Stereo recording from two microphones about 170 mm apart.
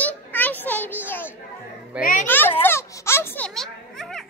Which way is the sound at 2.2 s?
10° left (ahead or behind).